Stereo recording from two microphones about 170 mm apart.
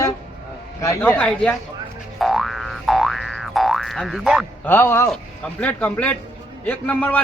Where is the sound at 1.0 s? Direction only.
5° left (ahead or behind).